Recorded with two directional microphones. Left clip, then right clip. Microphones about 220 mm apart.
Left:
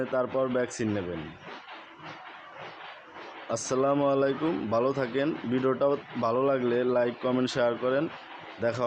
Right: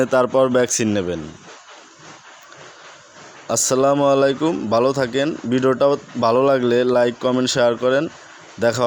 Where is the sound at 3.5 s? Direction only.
40° right (ahead or behind).